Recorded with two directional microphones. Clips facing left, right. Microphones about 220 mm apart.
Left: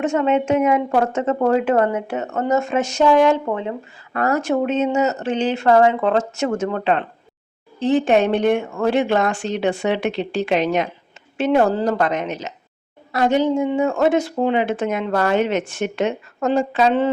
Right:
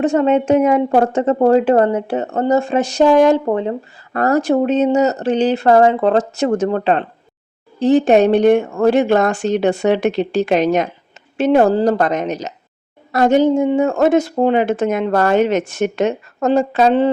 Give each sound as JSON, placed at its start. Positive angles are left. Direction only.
{"t": 0.0, "sound": "a woman's voice", "side_deg": -35}